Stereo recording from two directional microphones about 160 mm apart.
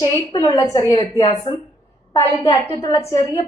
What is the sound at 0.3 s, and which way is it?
A woman's voice, 35° left (ahead or behind).